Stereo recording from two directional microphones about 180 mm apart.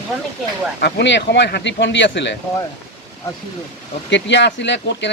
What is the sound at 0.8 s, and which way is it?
Speech, 65° left (ahead or behind).